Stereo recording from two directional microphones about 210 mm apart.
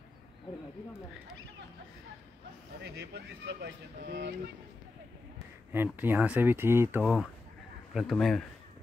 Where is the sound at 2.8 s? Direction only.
55° right (ahead or behind).